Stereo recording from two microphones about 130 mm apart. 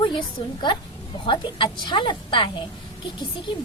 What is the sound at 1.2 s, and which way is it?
A woman's voice, 40° left (ahead or behind).